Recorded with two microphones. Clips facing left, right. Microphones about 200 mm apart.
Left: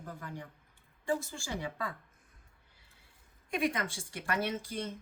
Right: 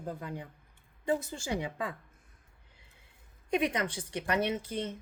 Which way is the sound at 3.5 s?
20° right (ahead or behind).